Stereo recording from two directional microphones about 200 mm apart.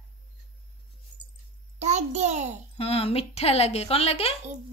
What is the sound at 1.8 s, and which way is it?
Speech, 35° right (ahead or behind).